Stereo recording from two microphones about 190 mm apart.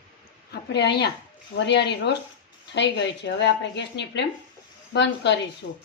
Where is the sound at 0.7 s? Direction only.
65° left (ahead or behind).